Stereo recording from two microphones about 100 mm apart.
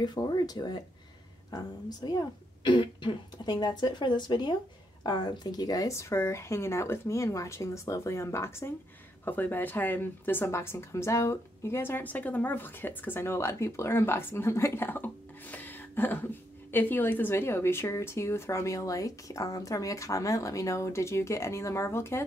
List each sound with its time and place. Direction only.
0.0 s speech: 45° left (ahead or behind); by 22.2 s 25° left (ahead or behind)